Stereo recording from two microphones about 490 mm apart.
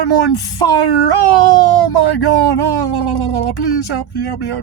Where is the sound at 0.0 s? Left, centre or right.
Left.